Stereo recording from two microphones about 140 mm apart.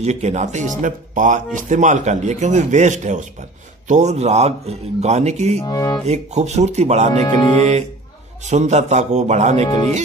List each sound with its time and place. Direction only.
0.0 s speech: 55° right (ahead or behind)
5.6 s speech: 25° left (ahead or behind)
6.0 s speech: 55° right (ahead or behind)
8.5 s speech: 55° right (ahead or behind)